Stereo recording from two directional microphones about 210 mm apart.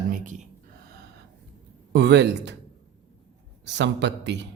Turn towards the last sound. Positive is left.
turn(degrees=-55)  # may be behind; listen again after turning